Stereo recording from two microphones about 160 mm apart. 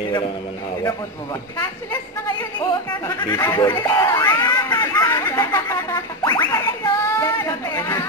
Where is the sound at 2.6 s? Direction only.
20° left (ahead or behind).